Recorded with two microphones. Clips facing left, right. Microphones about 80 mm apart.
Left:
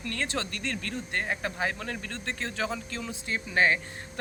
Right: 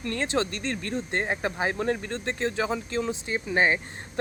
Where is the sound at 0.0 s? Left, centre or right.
Right.